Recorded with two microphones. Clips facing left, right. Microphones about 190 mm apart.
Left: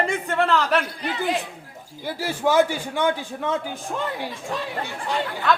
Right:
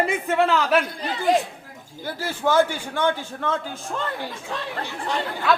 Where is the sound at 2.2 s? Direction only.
15° left (ahead or behind).